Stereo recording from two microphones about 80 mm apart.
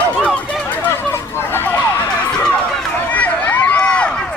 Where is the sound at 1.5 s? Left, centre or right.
Left.